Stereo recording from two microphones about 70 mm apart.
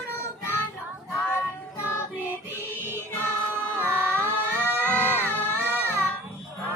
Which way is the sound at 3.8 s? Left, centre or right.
Left.